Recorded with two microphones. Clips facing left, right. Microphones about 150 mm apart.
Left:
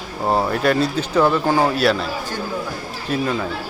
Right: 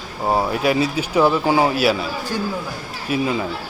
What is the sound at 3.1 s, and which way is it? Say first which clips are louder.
Speech: right 1 dB; 5° right (ahead or behind).